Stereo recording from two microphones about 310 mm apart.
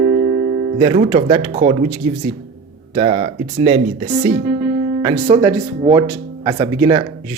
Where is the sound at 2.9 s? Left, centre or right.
Centre.